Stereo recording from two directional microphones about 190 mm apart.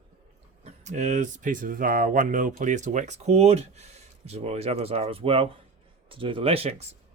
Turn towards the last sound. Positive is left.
turn(degrees=-35)  # may be behind; listen again after turning